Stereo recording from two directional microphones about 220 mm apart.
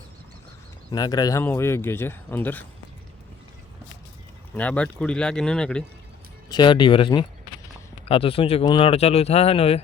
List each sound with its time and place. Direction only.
0.9 s speech: 15° left (ahead or behind)
4.5 s speech: 5° left (ahead or behind)
6.5 s speech: 20° left (ahead or behind)